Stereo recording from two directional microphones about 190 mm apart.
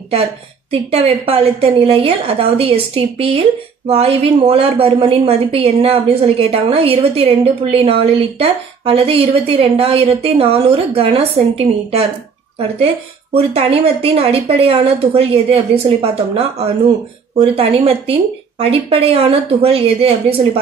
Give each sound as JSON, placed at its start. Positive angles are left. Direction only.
{"t": 0.7, "sound": "a woman's voice", "side_deg": -30}
{"t": 13.4, "sound": "a woman's voice", "side_deg": -30}